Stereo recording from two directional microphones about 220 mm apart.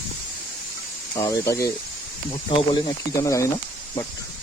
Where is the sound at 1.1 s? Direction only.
15° left (ahead or behind).